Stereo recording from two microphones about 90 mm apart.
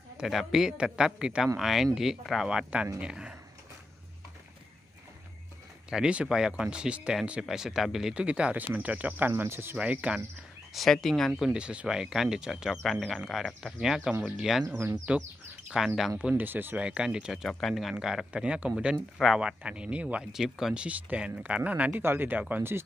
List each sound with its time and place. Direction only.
0.2 s speech: 5° right (ahead or behind)
5.9 s speech: 10° right (ahead or behind); by 9.8 s 25° right (ahead or behind)
9.8 s speech: 15° right (ahead or behind)
10.7 s speech: centre (ahead or behind)
11.4 s speech: 10° right (ahead or behind)
15.1 s speech: 15° right (ahead or behind)
17.9 s speech: 10° right (ahead or behind)
18.9 s speech: centre (ahead or behind); by 20.2 s 15° right (ahead or behind)
20.3 s speech: 5° right (ahead or behind); by 22.4 s 25° right (ahead or behind)